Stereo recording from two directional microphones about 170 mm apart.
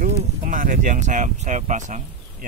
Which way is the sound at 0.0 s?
50° right (ahead or behind).